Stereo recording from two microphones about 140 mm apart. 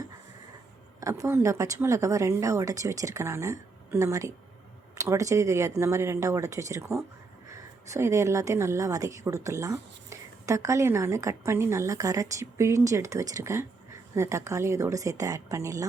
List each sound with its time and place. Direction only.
1.0 s a woman's voice: 20° right (ahead or behind)